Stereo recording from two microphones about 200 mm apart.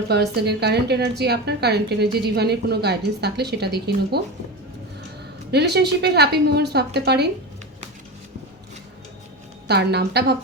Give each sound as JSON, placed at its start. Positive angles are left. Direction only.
{"t": 0.1, "sound": "a woman's voice", "side_deg": -55}
{"t": 5.5, "sound": "a woman's voice", "side_deg": -55}
{"t": 9.6, "sound": "a woman's voice", "side_deg": -55}